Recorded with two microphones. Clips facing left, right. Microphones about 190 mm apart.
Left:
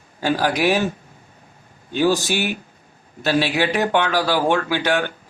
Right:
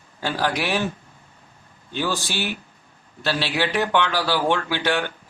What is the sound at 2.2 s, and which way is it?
Speech, 15° left (ahead or behind).